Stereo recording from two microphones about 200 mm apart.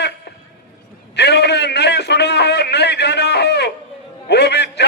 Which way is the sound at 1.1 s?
55° left (ahead or behind).